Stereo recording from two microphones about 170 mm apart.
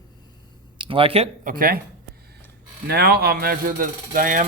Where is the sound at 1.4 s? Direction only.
55° right (ahead or behind).